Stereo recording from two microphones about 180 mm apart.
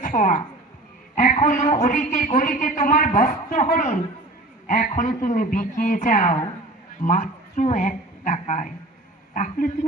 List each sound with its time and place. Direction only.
0.0 s a woman's voice: 45° left (ahead or behind)